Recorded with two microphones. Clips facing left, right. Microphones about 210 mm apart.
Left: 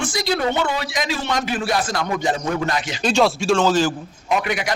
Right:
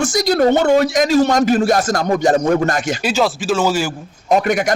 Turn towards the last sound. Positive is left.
turn(degrees=-45)  # may be behind; listen again after turning